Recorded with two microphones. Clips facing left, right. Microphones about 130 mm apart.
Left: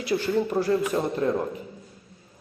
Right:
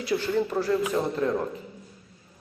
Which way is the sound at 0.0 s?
15° left (ahead or behind).